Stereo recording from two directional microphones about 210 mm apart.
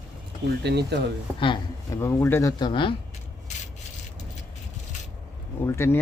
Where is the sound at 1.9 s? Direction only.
10° left (ahead or behind).